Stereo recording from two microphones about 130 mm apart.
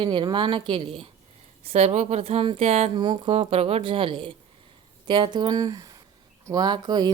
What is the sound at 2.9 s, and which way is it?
Speech, 35° right (ahead or behind).